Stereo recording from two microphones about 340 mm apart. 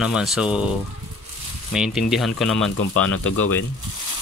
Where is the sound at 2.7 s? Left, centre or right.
Left.